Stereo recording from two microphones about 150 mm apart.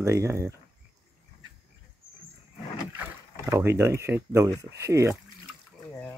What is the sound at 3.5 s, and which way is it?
Speech, 15° right (ahead or behind).